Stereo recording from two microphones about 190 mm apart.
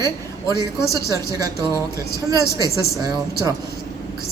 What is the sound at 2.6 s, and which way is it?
Speech, 20° right (ahead or behind).